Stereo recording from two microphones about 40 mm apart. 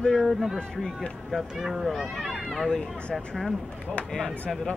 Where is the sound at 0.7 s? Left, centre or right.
Centre.